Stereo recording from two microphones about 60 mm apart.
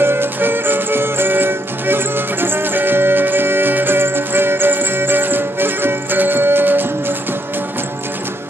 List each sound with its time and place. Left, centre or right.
0.0 s music: right